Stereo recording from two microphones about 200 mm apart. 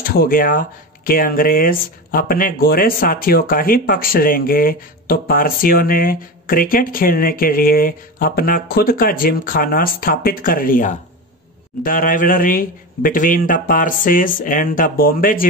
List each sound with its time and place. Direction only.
0.0 s speech: 50° left (ahead or behind)